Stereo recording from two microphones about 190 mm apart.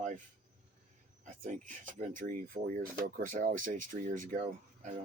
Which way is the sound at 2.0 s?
45° right (ahead or behind).